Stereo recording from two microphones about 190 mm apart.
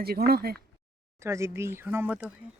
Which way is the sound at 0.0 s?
55° right (ahead or behind).